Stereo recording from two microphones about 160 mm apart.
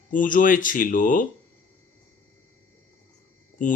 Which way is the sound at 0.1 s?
55° left (ahead or behind).